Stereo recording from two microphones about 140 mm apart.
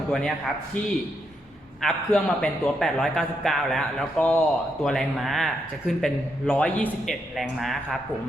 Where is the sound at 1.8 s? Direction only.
5° left (ahead or behind).